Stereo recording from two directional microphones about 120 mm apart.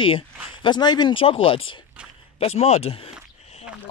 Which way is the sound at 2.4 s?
60° left (ahead or behind).